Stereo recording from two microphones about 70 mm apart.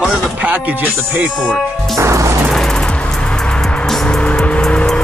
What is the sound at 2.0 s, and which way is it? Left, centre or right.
Music, right.